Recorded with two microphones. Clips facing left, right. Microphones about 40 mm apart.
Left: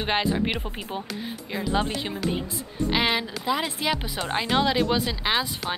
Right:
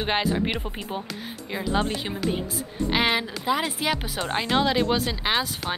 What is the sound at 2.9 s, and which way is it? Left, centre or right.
A woman's voice, centre.